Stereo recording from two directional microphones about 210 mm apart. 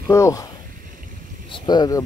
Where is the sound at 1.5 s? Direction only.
20° left (ahead or behind).